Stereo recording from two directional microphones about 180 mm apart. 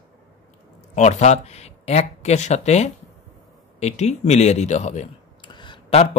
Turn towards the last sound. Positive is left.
turn(degrees=30)  # may be behind; listen again after turning